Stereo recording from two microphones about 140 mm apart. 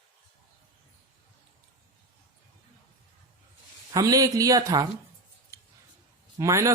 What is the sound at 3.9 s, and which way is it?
Speech, 25° right (ahead or behind).